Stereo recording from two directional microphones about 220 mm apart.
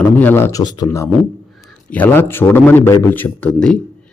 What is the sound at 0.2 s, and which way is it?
A man's voice, 10° left (ahead or behind).